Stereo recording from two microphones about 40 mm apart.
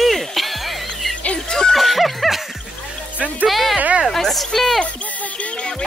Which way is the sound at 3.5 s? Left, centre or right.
Centre.